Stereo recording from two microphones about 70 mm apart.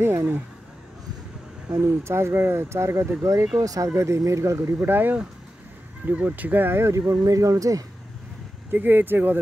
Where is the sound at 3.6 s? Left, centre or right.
Right.